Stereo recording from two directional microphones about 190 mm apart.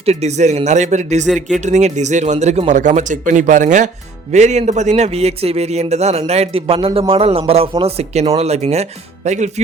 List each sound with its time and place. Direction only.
0.0 s a man's voice: 35° right (ahead or behind)